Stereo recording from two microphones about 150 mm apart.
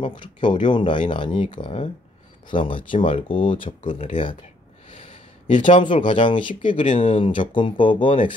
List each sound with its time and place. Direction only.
0.0 s speech: 30° left (ahead or behind)
4.9 s a sound: 40° left (ahead or behind)
5.9 s speech: 35° left (ahead or behind)